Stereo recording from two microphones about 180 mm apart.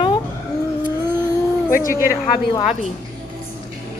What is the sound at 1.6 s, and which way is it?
Speech, 50° left (ahead or behind).